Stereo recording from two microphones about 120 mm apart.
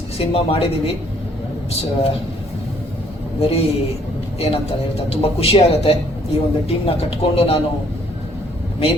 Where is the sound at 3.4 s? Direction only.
55° left (ahead or behind).